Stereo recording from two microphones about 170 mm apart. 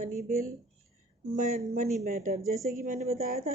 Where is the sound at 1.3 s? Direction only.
50° right (ahead or behind).